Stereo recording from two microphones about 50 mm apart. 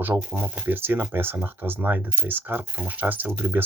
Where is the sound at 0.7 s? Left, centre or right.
Right.